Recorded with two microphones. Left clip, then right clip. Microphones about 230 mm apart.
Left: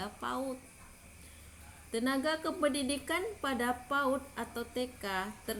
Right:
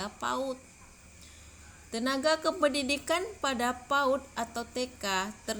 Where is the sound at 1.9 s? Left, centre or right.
Right.